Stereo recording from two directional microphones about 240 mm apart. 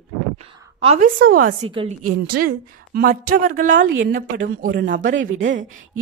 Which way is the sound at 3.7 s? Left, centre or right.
Right.